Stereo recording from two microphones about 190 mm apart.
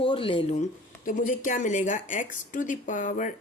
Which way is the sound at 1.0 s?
45° left (ahead or behind).